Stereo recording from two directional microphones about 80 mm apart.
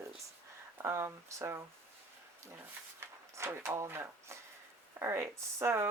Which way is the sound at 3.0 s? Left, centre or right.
Right.